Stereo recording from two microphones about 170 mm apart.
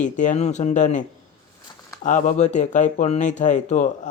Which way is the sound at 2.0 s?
50° left (ahead or behind).